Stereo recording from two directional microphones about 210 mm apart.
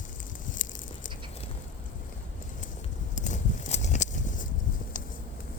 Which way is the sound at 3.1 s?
35° left (ahead or behind).